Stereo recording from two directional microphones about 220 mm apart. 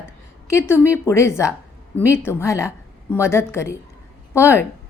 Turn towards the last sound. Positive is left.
turn(degrees=10)  # may be behind; listen again after turning